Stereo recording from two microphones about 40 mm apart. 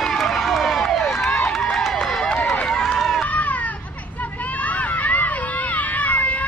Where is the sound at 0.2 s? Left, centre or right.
Centre.